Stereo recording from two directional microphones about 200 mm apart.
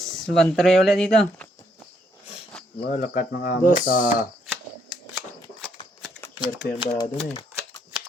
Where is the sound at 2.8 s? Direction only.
40° left (ahead or behind).